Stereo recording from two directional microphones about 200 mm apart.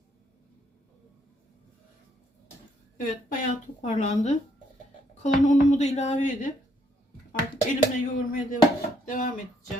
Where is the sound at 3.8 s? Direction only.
35° left (ahead or behind).